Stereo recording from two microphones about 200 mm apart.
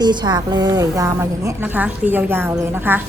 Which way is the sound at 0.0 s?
20° right (ahead or behind).